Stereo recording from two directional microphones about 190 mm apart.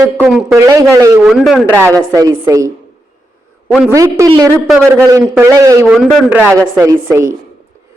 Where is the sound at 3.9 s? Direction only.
15° right (ahead or behind).